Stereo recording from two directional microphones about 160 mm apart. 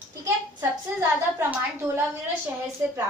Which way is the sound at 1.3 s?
15° right (ahead or behind).